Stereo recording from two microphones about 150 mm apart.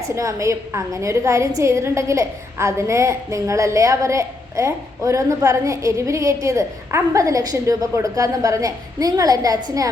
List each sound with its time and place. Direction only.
0.2 s a woman's voice: 20° right (ahead or behind)